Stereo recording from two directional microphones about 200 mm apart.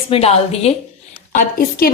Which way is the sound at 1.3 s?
45° left (ahead or behind).